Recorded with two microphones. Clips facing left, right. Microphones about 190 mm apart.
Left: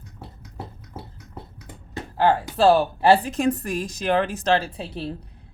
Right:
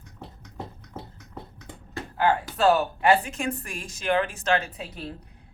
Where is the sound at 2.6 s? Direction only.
30° left (ahead or behind).